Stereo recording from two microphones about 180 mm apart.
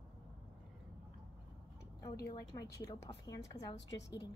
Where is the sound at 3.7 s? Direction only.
80° left.